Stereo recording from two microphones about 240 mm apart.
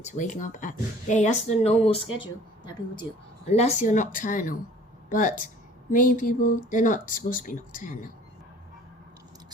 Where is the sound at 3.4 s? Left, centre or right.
Left.